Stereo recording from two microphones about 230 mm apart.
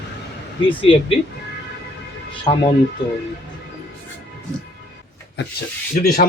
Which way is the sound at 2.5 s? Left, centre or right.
Centre.